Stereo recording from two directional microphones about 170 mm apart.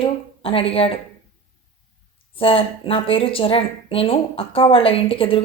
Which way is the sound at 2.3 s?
30° left (ahead or behind).